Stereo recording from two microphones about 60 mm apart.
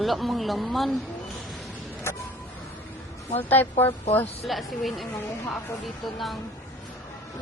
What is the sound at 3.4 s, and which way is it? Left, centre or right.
Speech, left.